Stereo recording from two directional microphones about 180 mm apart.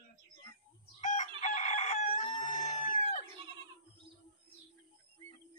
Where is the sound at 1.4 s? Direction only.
40° left (ahead or behind).